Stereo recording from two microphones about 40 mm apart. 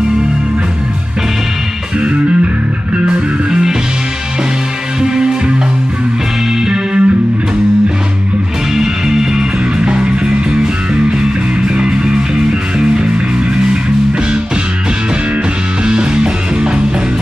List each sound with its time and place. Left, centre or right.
2.0 s music: right
5.0 s music: centre
6.6 s music: centre
8.7 s music: centre
15.8 s music: right